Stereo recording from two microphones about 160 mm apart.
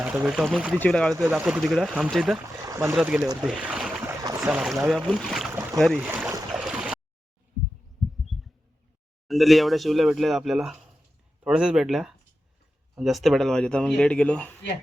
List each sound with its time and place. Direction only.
0.0 s speech: 5° right (ahead or behind)
0.7 s speech: 5° left (ahead or behind)
1.3 s speech: 10° right (ahead or behind)
2.6 s speech: 20° right (ahead or behind)
2.9 s speech: 5° right (ahead or behind)
4.0 s boat: 20° right (ahead or behind)
4.5 s speech: centre (ahead or behind)
6.0 s boat: 15° right (ahead or behind)
8.0 s a sound: centre (ahead or behind)
9.2 s speech: centre (ahead or behind)